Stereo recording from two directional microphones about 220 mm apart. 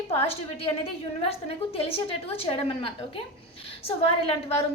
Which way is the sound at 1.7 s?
25° left (ahead or behind).